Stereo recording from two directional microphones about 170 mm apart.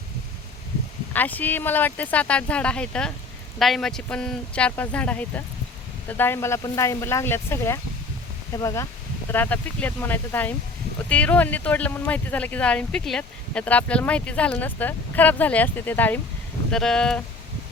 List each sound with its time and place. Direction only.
1.1 s speech: 10° left (ahead or behind)